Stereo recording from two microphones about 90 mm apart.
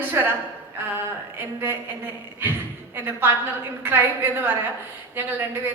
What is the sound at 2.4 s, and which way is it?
A woman's voice, 25° right (ahead or behind).